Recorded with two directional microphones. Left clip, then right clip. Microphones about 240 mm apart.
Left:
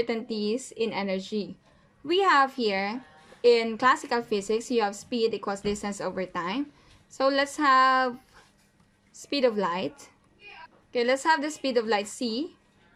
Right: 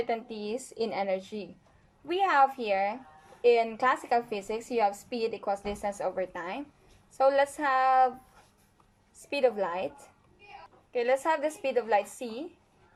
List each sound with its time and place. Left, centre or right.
0.0 s a woman's voice: centre
9.3 s a woman's voice: left
10.9 s a woman's voice: left